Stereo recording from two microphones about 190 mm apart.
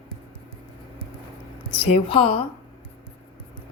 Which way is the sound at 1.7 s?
30° left (ahead or behind).